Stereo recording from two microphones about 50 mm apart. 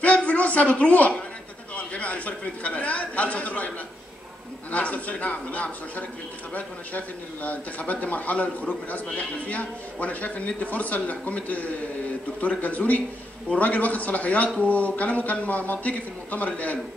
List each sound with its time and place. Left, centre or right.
0.0 s a woman's voice: left
4.7 s a man's voice: left